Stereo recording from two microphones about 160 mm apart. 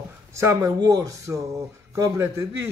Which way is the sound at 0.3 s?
20° right (ahead or behind).